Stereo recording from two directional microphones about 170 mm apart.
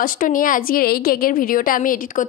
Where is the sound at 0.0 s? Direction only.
55° left (ahead or behind).